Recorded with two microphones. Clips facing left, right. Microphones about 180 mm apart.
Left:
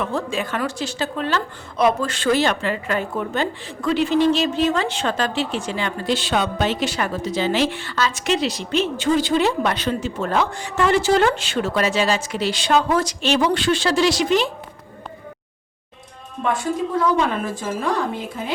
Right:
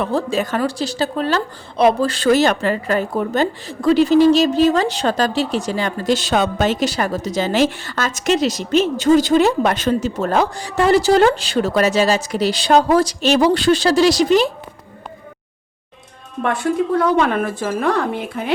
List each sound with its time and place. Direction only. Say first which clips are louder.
0.0 s a woman's voice: right 5 dB; 35° right (ahead or behind)
16.4 s a woman's voice: right 4 dB; 65° right (ahead or behind)